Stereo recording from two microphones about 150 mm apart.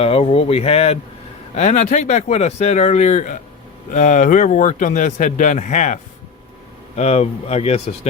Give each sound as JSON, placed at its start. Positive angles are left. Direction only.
{"t": 0.0, "sound": "speech", "side_deg": 40}